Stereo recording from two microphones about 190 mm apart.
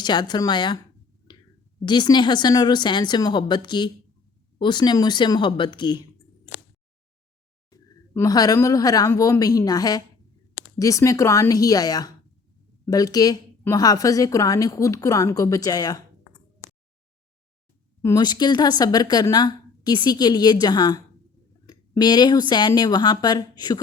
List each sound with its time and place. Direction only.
0.0 s speech: 20° left (ahead or behind)
1.3 s a sound: 25° left (ahead or behind)
1.8 s speech: 25° left (ahead or behind)
7.7 s a woman's voice: 20° left (ahead or behind)
18.0 s speech: 20° left (ahead or behind)